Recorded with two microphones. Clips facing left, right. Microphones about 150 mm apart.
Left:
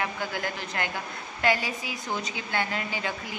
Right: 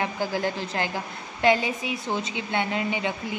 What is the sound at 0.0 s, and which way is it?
A woman's voice, 30° right (ahead or behind).